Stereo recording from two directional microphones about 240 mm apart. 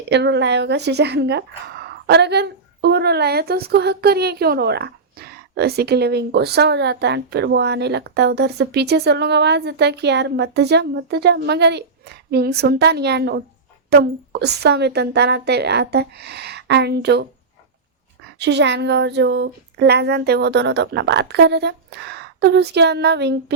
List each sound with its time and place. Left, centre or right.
0.1 s speech: right
18.3 s speech: right